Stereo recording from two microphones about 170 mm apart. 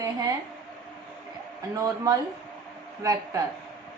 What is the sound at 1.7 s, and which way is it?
A woman's voice, 20° right (ahead or behind).